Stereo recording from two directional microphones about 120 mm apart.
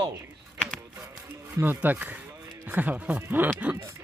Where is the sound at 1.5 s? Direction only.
15° right (ahead or behind).